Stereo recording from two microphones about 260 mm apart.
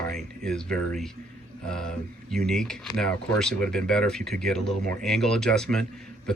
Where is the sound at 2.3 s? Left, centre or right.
Centre.